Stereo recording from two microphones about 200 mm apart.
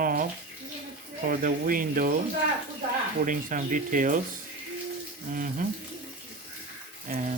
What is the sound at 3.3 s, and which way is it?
Speech, 40° right (ahead or behind).